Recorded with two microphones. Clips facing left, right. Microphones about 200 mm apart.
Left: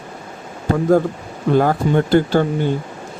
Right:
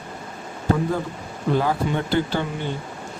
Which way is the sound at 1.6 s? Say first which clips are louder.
Left 7 dB; 50° left (ahead or behind).